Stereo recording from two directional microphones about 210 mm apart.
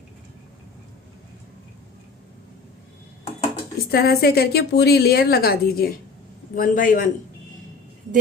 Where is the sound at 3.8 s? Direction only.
45° left (ahead or behind).